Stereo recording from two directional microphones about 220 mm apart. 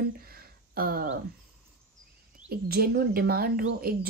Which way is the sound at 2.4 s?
45° right (ahead or behind).